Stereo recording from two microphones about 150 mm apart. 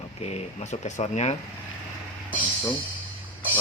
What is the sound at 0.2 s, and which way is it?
Speech, 45° left (ahead or behind).